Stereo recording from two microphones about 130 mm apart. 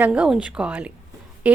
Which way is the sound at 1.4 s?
10° right (ahead or behind).